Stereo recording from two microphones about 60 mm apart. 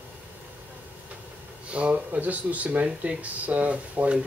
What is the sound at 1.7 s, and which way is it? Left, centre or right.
Speech, right.